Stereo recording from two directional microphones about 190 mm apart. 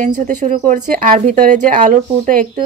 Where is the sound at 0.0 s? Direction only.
40° right (ahead or behind).